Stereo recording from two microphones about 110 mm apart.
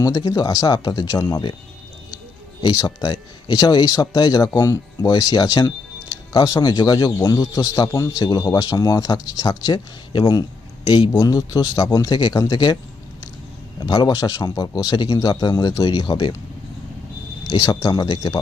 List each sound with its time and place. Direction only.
0.0 s speech: 35° left (ahead or behind)
2.6 s speech: 40° left (ahead or behind)
17.4 s speech: 35° left (ahead or behind)